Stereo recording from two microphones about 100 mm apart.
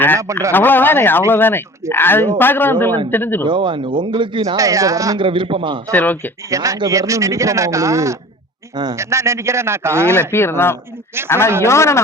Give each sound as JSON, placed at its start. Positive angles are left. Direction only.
{"t": 0.5, "sound": "speech", "side_deg": 20}
{"t": 3.4, "sound": "speech", "side_deg": -55}
{"t": 4.5, "sound": "speech", "side_deg": -35}
{"t": 5.1, "sound": "a man's voice", "side_deg": -55}
{"t": 5.9, "sound": "speech", "side_deg": 15}
{"t": 6.5, "sound": "speech", "side_deg": -30}
{"t": 8.7, "sound": "a man's voice", "side_deg": -45}
{"t": 9.0, "sound": "a man's voice", "side_deg": -30}
{"t": 10.2, "sound": "speech", "side_deg": 25}